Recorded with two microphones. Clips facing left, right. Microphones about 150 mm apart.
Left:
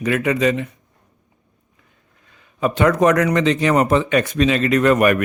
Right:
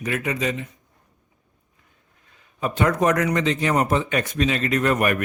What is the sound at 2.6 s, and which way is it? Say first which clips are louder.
Speech: left 5 dB; 90° left.